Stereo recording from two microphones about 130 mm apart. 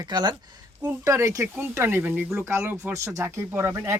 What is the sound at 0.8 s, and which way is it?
Speech, 20° right (ahead or behind).